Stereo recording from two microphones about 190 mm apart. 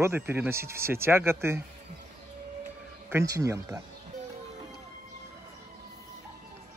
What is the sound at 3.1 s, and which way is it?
Speech, 15° right (ahead or behind).